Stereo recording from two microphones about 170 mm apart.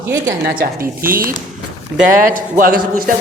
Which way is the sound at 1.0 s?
60° right (ahead or behind).